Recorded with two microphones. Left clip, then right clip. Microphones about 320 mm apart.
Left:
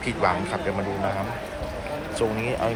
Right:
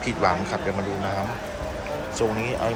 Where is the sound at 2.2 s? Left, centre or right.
Centre.